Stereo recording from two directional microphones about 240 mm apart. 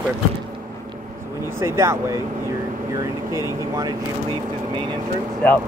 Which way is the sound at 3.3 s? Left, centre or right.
Centre.